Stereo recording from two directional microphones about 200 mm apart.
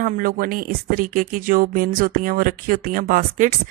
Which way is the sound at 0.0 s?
45° right (ahead or behind).